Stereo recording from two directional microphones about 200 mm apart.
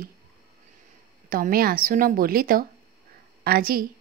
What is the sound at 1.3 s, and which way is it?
Speech, 45° right (ahead or behind).